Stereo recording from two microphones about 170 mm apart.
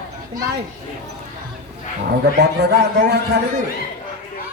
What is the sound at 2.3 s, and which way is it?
Speech, 80° right.